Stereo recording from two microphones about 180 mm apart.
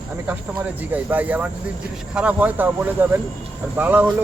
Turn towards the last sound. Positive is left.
turn(degrees=-10)  # may be behind; listen again after turning